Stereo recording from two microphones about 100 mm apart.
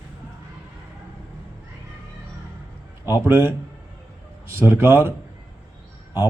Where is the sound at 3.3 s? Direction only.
25° right (ahead or behind).